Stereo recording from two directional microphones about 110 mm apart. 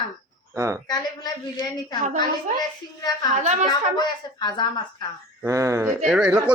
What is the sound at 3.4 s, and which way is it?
Speech, 90° right.